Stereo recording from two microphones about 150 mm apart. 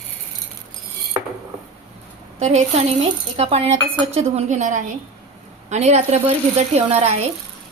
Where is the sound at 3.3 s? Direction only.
45° right (ahead or behind).